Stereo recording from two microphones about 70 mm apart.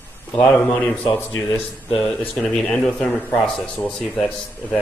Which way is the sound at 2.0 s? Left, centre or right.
Centre.